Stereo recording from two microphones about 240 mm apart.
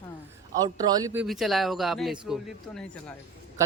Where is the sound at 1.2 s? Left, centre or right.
Centre.